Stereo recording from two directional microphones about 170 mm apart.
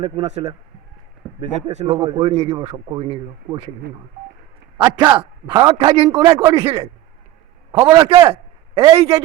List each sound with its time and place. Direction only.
0.0 s speech: 40° right (ahead or behind)
1.9 s a man's voice: 20° right (ahead or behind)
2.1 s speech: 35° right (ahead or behind)
4.8 s a man's voice: 30° right (ahead or behind)